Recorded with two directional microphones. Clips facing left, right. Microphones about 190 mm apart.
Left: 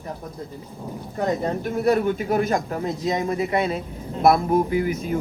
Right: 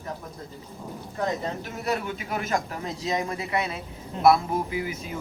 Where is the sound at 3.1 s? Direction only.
25° left (ahead or behind).